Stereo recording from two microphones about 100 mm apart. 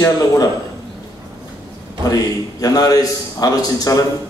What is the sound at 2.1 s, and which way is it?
A man's voice, 40° left (ahead or behind).